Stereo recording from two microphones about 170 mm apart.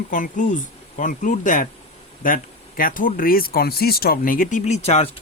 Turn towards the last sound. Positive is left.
turn(degrees=40)  # may be behind; listen again after turning